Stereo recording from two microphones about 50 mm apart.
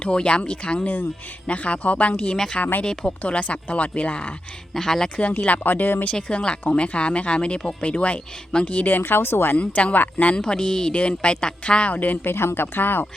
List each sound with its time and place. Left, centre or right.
0.0 s speech: left
2.3 s speech: centre
3.2 s speech: left
4.7 s speech: centre
5.5 s speech: left
6.1 s speech: centre
9.0 s speech: left
9.6 s speech: left
10.3 s speech: centre
11.9 s speech: left
12.3 s speech: left